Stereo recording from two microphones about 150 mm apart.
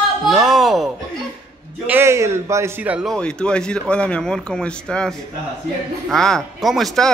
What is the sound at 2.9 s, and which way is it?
Speech, 5° left (ahead or behind).